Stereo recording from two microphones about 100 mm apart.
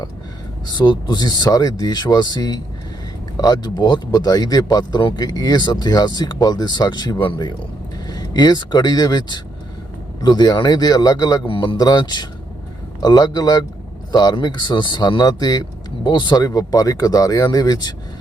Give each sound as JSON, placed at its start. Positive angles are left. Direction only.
{"t": 0.7, "sound": "speech", "side_deg": 45}
{"t": 8.0, "sound": "speech", "side_deg": 40}
{"t": 11.4, "sound": "a man's voice", "side_deg": 60}
{"t": 11.8, "sound": "speech", "side_deg": 45}